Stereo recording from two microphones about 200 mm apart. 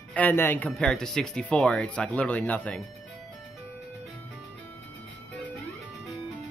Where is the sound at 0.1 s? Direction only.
10° left (ahead or behind).